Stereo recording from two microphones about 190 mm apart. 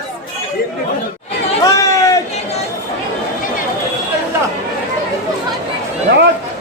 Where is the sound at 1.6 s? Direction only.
15° left (ahead or behind).